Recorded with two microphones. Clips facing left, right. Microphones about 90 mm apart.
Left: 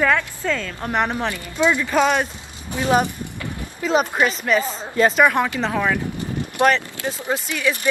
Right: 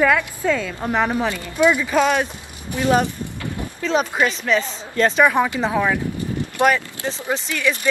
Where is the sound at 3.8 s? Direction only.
15° left (ahead or behind).